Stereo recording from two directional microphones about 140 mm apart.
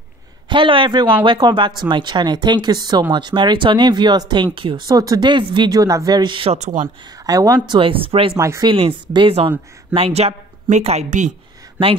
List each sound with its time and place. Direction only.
0.5 s speech: 35° right (ahead or behind); by 6.9 s 55° right (ahead or behind)
7.1 s speech: 25° right (ahead or behind)
8.4 s speech: 20° right (ahead or behind)
8.6 s speech: 40° right (ahead or behind)
9.9 s speech: 50° right (ahead or behind)